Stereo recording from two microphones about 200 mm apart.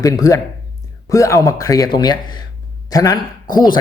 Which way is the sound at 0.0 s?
15° left (ahead or behind).